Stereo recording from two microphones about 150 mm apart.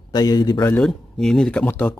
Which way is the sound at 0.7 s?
5° left (ahead or behind).